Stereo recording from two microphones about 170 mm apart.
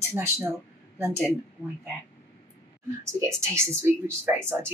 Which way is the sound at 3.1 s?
15° right (ahead or behind).